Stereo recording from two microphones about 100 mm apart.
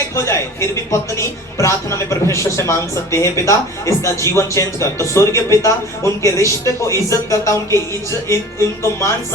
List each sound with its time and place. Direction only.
0.2 s a woman's voice: 25° left (ahead or behind)
8.8 s a woman's voice: 25° left (ahead or behind)